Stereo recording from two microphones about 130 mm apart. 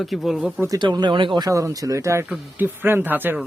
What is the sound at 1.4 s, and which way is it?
Speech, 25° right (ahead or behind).